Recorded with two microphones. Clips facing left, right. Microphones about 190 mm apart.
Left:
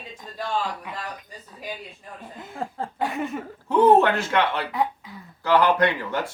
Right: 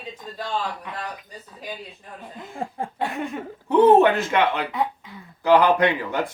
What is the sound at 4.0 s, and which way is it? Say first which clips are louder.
Speech: right 3 dB; 15° right (ahead or behind).